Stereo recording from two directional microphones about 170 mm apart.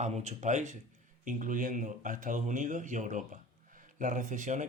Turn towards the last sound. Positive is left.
turn(degrees=-45)  # may be behind; listen again after turning